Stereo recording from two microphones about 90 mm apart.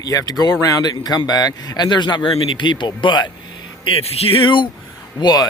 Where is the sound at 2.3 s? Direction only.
75° left (ahead or behind); by 3.2 s 60° left (ahead or behind).